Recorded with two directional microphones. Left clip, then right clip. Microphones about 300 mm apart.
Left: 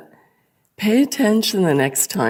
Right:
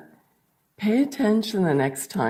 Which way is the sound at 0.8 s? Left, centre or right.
Left.